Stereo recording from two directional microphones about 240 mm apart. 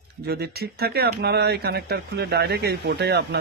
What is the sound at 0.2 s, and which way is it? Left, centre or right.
Speech, right.